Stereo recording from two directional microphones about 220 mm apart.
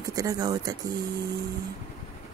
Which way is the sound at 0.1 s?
15° right (ahead or behind).